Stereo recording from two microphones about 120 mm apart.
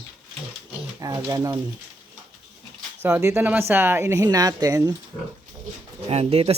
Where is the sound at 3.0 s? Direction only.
25° right (ahead or behind).